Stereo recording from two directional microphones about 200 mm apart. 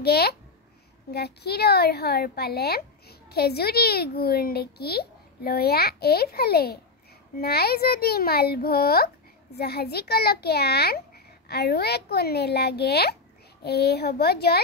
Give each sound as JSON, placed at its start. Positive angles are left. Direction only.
{"t": 0.0, "sound": "a woman's voice", "side_deg": 50}